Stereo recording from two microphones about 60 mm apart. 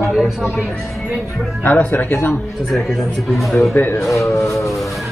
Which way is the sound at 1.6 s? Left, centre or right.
Left.